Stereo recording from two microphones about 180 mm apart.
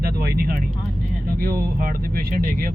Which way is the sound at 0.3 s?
55° right (ahead or behind).